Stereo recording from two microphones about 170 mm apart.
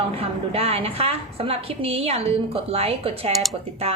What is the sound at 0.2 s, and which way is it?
A woman's voice, 35° right (ahead or behind).